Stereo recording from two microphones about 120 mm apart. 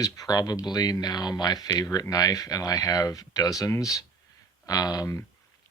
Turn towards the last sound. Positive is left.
turn(degrees=25)  # may be behind; listen again after turning